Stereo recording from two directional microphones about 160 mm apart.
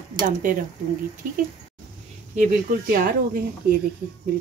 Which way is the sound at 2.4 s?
65° right (ahead or behind).